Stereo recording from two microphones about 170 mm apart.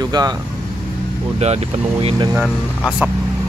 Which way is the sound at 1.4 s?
40° right (ahead or behind).